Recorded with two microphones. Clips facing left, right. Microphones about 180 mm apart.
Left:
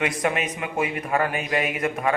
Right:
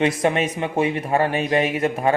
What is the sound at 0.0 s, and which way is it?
A man's voice, 30° right (ahead or behind).